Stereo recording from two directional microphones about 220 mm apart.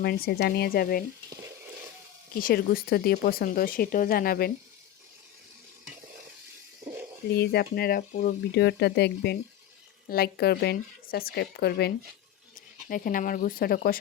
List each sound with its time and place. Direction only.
0.0 s speech: 45° left (ahead or behind)
2.3 s speech: 40° left (ahead or behind)
7.3 s speech: 45° left (ahead or behind)